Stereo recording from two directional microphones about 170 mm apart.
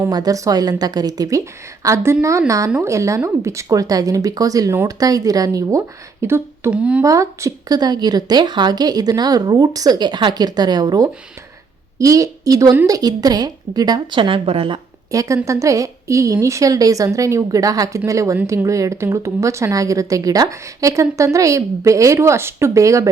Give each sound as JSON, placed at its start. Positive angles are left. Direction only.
{"t": 0.0, "sound": "a woman's voice", "side_deg": -20}
{"t": 7.0, "sound": "a woman's voice", "side_deg": -20}
{"t": 15.1, "sound": "a woman's voice", "side_deg": -20}